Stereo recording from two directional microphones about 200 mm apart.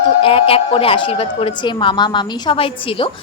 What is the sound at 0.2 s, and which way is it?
Speech, 25° left (ahead or behind).